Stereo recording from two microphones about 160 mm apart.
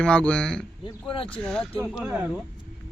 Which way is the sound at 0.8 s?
35° left (ahead or behind).